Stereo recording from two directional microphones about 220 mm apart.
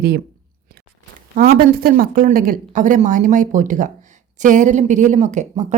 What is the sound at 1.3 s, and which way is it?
Speech, 40° right (ahead or behind).